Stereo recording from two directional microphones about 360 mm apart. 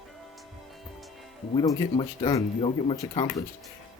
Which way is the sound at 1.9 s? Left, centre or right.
Centre.